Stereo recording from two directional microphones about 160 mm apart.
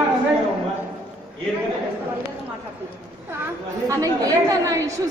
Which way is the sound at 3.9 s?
20° right (ahead or behind).